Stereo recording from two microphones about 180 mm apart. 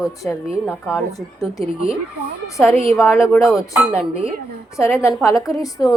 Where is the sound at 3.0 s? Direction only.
15° left (ahead or behind).